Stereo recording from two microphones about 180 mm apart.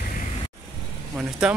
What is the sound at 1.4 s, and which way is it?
Speech, 5° right (ahead or behind).